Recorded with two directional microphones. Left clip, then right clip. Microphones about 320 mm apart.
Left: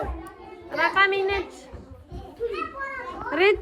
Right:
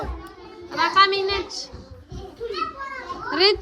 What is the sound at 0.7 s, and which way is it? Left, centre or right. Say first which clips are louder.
Speech: right 3 dB; centre.